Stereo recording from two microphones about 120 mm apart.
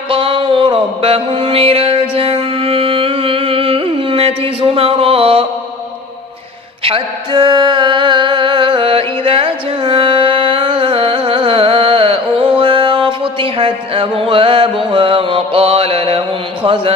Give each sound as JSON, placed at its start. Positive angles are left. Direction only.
{"t": 0.1, "sound": "mantra", "side_deg": -45}
{"t": 6.8, "sound": "music", "side_deg": -45}
{"t": 16.6, "sound": "a man's voice", "side_deg": -45}